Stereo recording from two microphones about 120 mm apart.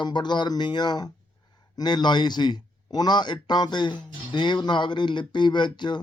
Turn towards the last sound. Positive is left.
turn(degrees=40)  # may be behind; listen again after turning